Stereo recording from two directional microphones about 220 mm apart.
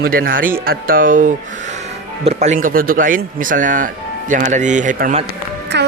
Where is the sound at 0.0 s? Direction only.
40° right (ahead or behind).